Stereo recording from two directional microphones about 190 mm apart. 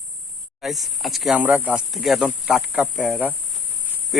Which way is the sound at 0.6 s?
Centre (ahead or behind).